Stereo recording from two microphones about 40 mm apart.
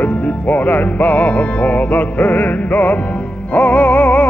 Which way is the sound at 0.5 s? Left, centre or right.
Left.